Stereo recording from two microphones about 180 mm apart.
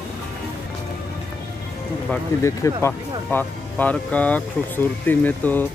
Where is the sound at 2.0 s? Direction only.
15° left (ahead or behind).